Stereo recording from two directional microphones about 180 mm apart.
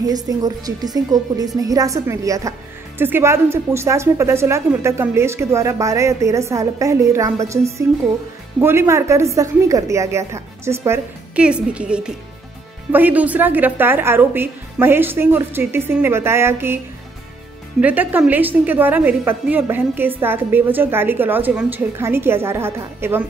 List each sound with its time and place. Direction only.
0.0 s a woman's voice: 20° right (ahead or behind)